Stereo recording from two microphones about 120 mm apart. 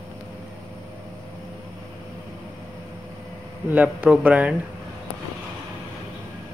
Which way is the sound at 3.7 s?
10° right (ahead or behind).